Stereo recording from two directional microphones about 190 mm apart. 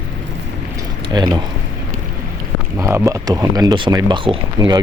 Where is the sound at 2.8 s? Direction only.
15° right (ahead or behind).